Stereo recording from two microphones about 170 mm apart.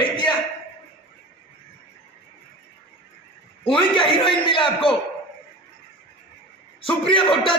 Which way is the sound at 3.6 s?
30° left (ahead or behind).